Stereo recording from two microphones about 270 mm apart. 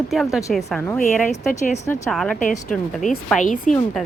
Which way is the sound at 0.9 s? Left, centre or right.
Left.